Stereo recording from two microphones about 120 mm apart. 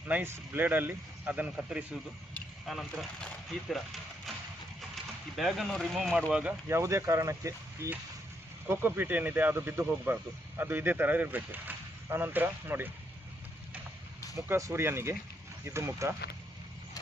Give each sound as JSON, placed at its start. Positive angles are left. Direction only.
{"t": 0.0, "sound": "speech", "side_deg": -15}
{"t": 2.6, "sound": "speech", "side_deg": 0}
{"t": 5.4, "sound": "speech", "side_deg": 0}
{"t": 6.3, "sound": "speech", "side_deg": -15}
{"t": 14.3, "sound": "speech", "side_deg": -25}